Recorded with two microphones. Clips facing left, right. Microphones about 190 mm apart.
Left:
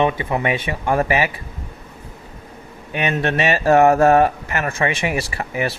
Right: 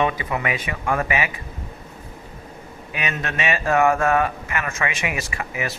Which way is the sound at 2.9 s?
30° left (ahead or behind).